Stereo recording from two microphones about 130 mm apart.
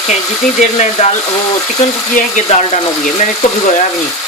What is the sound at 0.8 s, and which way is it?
Speech, 60° left (ahead or behind).